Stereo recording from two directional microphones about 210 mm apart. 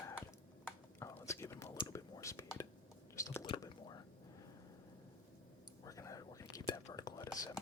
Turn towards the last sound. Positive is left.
turn(degrees=15)  # may be behind; listen again after turning